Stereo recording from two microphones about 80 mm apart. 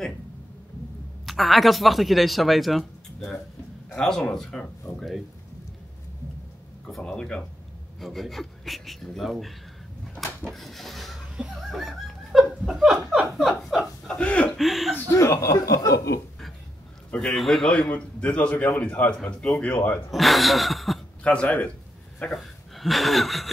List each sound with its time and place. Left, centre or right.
1.2 s speech: centre
7.0 s speech: centre
10.5 s printer: centre
11.7 s laughter: centre
12.9 s chuckle: centre
14.0 s chuckle: centre
14.6 s speech: centre
15.0 s speech: left
17.1 s speech: centre
17.9 s a man's voice: centre
20.1 s speech: centre
21.2 s speech: centre
22.3 s speech: centre